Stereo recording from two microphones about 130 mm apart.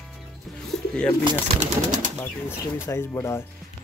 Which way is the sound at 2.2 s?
20° left (ahead or behind).